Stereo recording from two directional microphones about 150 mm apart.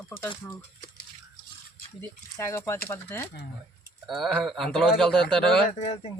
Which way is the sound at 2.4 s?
20° left (ahead or behind).